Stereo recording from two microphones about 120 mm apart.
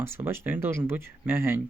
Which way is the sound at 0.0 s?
20° right (ahead or behind).